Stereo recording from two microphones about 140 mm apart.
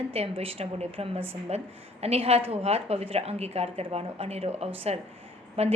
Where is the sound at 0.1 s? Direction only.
45° right (ahead or behind).